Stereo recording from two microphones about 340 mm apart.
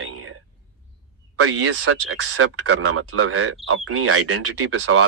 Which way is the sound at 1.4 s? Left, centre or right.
Right.